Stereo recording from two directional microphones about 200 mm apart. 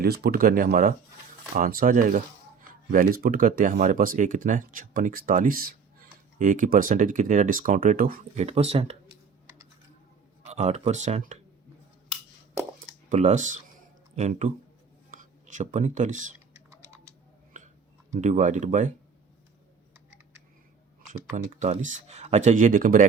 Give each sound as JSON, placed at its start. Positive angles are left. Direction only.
{"t": 0.0, "sound": "speech", "side_deg": -50}
{"t": 10.5, "sound": "speech", "side_deg": -35}
{"t": 13.1, "sound": "speech", "side_deg": -35}
{"t": 16.6, "sound": "a sound", "side_deg": -15}
{"t": 18.1, "sound": "speech", "side_deg": -35}
{"t": 21.3, "sound": "speech", "side_deg": -35}